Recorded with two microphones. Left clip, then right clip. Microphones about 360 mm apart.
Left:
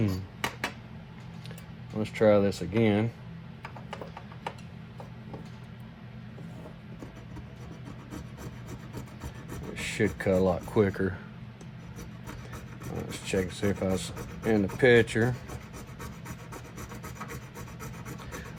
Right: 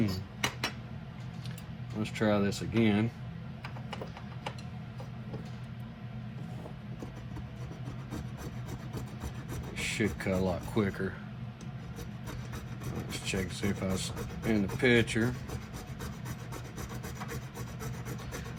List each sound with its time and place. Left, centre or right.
0.0 s a sound: centre
2.0 s speech: left
9.7 s speech: left
13.1 s speech: left
16.7 s rub: centre